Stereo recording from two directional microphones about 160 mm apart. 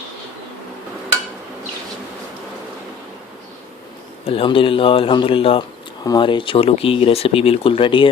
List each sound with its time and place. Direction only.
4.3 s speech: 35° left (ahead or behind)